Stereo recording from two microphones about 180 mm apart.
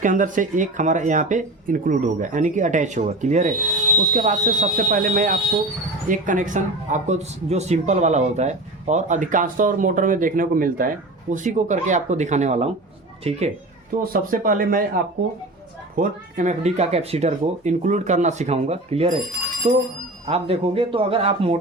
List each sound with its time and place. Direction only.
0.0 s speech: 45° right (ahead or behind)
14.1 s speech: 50° right (ahead or behind); by 21.6 s 35° right (ahead or behind)